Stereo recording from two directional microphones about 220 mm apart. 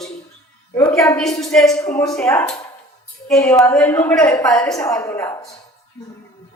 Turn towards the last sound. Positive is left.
turn(degrees=10)  # may be behind; listen again after turning